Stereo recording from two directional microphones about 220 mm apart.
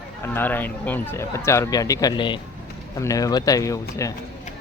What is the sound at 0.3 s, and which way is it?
Speech, 10° left (ahead or behind).